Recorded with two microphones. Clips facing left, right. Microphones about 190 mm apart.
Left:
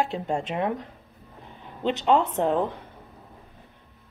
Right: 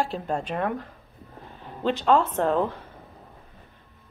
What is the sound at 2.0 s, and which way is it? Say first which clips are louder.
Speech: even; 20° left (ahead or behind).